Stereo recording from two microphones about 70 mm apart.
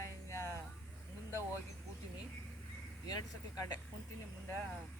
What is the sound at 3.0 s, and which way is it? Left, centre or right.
Speech, left.